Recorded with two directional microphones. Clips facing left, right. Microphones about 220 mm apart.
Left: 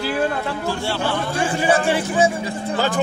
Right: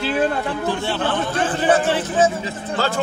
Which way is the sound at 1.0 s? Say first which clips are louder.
Even; 10° left (ahead or behind).